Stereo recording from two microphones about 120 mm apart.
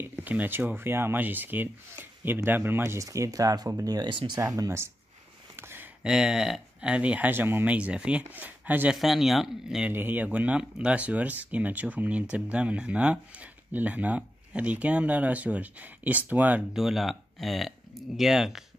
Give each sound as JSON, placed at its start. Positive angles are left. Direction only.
{"t": 0.2, "sound": "speech", "side_deg": -15}
{"t": 4.4, "sound": "speech", "side_deg": -30}
{"t": 5.6, "sound": "a sound", "side_deg": -20}
{"t": 6.0, "sound": "speech", "side_deg": -5}
{"t": 8.9, "sound": "speech", "side_deg": 0}
{"t": 16.7, "sound": "speech", "side_deg": 0}